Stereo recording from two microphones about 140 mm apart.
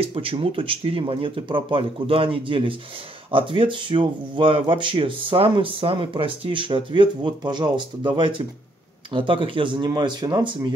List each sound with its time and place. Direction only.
0.0 s speech: 40° right (ahead or behind)